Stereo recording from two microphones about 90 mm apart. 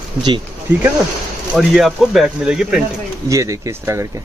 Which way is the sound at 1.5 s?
Centre (ahead or behind).